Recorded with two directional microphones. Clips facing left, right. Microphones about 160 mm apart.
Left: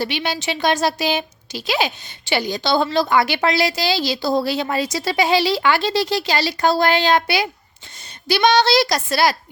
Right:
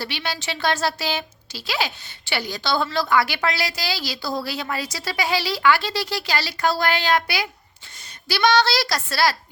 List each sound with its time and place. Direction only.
0.0 s a woman's voice: 20° left (ahead or behind)